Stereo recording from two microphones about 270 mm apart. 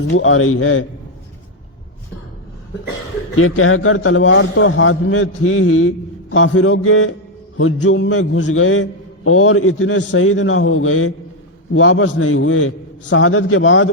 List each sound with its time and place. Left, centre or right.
0.1 s music: left
3.3 s music: left